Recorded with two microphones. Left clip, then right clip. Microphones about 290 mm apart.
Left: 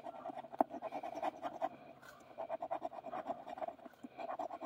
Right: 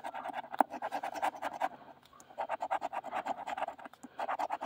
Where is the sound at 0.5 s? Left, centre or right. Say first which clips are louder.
Right 5 dB; right.